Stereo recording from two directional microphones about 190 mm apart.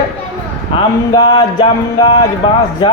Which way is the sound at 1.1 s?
25° left (ahead or behind).